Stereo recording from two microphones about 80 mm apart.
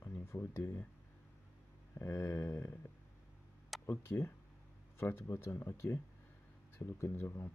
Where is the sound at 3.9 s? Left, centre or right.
Left.